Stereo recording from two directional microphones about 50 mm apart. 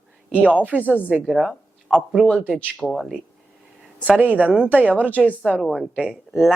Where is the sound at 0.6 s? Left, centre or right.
Right.